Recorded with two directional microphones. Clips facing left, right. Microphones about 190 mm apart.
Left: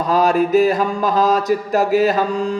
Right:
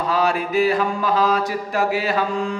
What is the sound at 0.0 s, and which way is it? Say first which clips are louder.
Mantra: left 5 dB; 40° left (ahead or behind).